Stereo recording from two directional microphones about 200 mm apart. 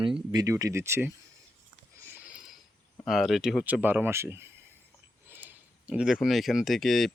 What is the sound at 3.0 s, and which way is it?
Speech, centre (ahead or behind).